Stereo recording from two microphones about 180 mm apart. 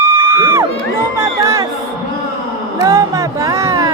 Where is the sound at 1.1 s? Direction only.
15° right (ahead or behind).